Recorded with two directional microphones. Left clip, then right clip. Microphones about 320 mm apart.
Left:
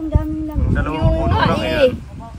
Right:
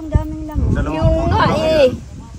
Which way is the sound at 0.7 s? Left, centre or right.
Centre.